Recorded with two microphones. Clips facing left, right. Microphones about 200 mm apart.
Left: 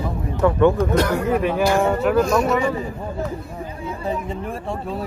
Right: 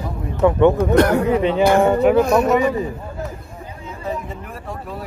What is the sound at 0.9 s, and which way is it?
Speech, 65° right (ahead or behind).